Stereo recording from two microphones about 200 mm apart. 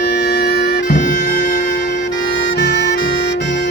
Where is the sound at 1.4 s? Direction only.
55° left (ahead or behind).